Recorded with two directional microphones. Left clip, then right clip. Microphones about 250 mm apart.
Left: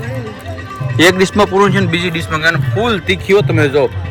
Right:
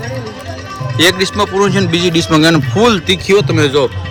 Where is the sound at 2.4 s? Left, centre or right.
Right.